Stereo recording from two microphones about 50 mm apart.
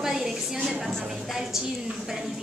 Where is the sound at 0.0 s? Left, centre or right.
Centre.